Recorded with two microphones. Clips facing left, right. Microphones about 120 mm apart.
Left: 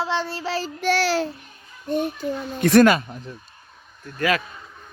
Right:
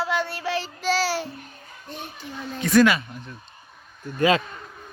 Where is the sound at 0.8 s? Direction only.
60° left (ahead or behind).